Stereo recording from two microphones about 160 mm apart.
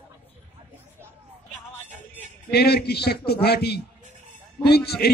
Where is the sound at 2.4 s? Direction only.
85° left.